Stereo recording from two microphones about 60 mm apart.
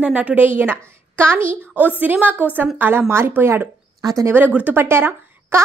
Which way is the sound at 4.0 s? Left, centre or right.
Right.